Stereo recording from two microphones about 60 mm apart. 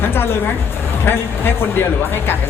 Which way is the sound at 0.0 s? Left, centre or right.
Left.